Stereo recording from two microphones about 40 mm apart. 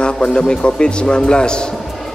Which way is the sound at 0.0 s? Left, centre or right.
Left.